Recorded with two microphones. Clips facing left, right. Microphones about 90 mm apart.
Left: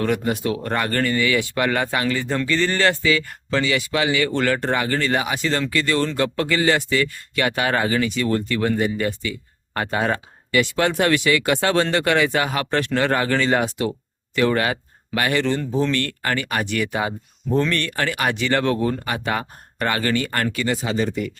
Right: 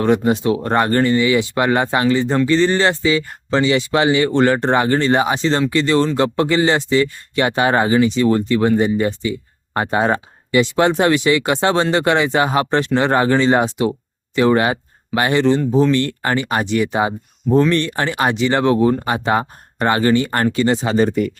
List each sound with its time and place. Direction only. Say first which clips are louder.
0.0 s speech: right 6 dB; 25° right (ahead or behind); by 21.3 s 45° right (ahead or behind)